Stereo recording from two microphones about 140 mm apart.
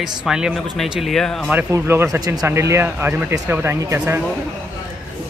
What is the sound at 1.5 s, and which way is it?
Speech, 15° right (ahead or behind).